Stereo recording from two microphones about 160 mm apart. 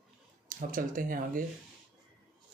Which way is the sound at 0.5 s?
55° right (ahead or behind).